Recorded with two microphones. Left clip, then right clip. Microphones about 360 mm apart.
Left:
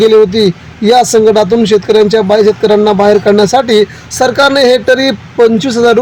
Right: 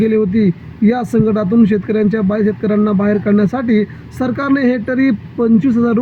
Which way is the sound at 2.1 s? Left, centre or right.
Left.